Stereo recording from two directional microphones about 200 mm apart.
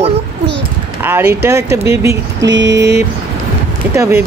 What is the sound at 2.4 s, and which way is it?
Vehicle, 60° right (ahead or behind).